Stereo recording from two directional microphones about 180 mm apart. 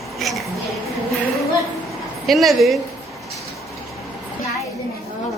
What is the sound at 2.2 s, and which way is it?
Speech, centre (ahead or behind).